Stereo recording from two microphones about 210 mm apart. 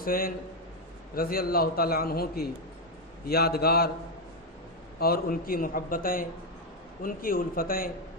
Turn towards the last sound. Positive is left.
turn(degrees=45)  # may be behind; listen again after turning